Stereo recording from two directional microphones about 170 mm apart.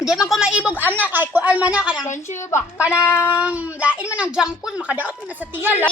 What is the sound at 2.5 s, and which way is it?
Speech, 15° left (ahead or behind).